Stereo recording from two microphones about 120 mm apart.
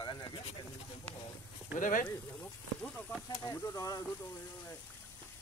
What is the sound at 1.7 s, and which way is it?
Speech, 90° left.